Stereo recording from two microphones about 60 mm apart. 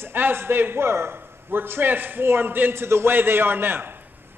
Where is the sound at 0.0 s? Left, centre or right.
Right.